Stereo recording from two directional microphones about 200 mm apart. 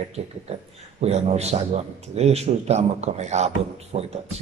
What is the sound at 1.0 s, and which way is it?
Speech, 30° right (ahead or behind).